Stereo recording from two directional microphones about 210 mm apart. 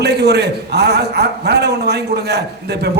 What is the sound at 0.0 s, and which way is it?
A man's voice, 50° right (ahead or behind).